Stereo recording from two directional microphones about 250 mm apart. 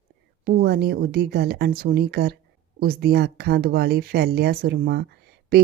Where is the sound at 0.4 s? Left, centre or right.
Right.